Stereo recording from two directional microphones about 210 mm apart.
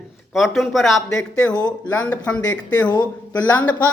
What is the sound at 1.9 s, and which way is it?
Speech, 5° left (ahead or behind).